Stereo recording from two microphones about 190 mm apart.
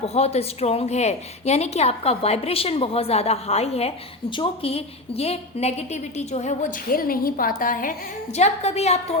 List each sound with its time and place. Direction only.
0.0 s a woman's voice: 35° left (ahead or behind)